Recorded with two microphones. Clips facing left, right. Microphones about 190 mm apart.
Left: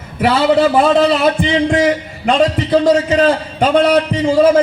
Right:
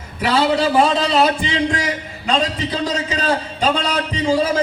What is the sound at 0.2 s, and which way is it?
A man's voice, 55° left (ahead or behind).